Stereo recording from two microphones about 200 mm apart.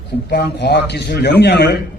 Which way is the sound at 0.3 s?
55° left (ahead or behind).